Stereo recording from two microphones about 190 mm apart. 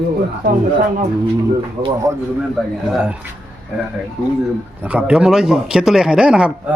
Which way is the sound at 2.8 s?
5° right (ahead or behind).